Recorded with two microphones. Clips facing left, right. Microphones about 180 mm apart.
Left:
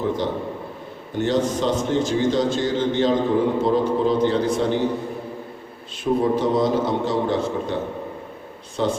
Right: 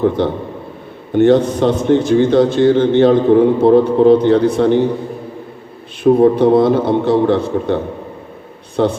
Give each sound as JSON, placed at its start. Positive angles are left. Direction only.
{"t": 0.2, "sound": "a man's voice", "side_deg": -60}
{"t": 6.0, "sound": "a man's voice", "side_deg": -60}